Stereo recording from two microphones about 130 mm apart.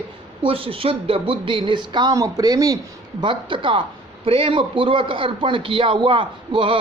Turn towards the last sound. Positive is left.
turn(degrees=-40)  # may be behind; listen again after turning